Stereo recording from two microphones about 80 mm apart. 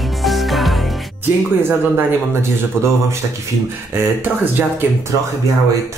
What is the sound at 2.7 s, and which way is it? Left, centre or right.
Speech, centre.